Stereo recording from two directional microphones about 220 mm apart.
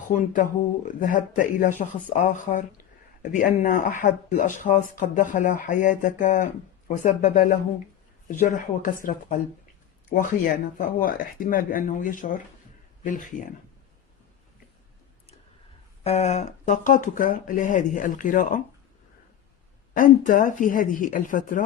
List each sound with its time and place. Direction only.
0.1 s speech: 40° left (ahead or behind)
16.0 s speech: 30° left (ahead or behind)
19.9 s speech: 35° left (ahead or behind)